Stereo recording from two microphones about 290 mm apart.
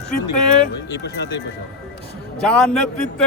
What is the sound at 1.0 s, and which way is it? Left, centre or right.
Speech, left.